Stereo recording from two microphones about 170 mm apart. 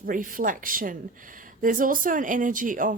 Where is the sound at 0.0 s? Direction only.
55° right (ahead or behind).